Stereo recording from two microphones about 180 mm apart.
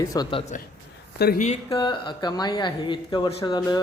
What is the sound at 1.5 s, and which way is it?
Speech, 25° left (ahead or behind).